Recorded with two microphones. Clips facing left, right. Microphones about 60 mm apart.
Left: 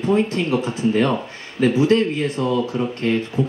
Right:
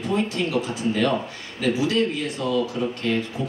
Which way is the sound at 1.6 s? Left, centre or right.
Left.